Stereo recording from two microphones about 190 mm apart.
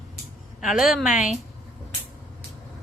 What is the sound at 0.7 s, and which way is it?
Speech, centre (ahead or behind).